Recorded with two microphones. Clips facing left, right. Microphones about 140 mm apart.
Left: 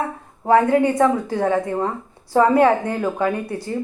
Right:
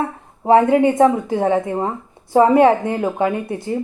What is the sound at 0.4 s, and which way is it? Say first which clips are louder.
A woman's voice: right 3 dB; 20° right (ahead or behind).